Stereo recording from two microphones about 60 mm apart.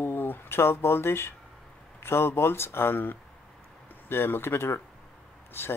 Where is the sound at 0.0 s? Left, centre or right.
Left.